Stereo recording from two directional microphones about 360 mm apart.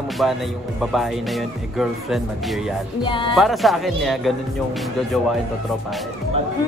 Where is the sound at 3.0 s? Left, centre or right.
Centre.